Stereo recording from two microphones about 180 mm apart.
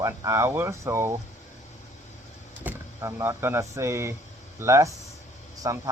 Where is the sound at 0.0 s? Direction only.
20° right (ahead or behind).